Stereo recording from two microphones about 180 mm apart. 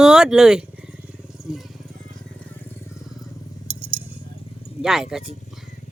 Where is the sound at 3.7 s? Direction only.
35° right (ahead or behind).